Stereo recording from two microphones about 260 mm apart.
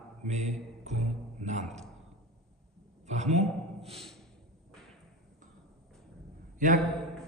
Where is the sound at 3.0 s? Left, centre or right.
Right.